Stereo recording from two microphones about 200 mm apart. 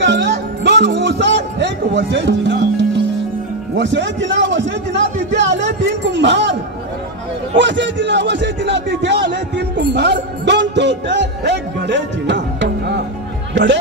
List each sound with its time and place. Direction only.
0.0 s music: 60° right (ahead or behind)
3.7 s a man's voice: 65° right (ahead or behind)
7.5 s a man's voice: 65° right (ahead or behind)